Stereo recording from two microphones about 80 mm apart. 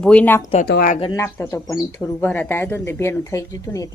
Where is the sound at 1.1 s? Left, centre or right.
Left.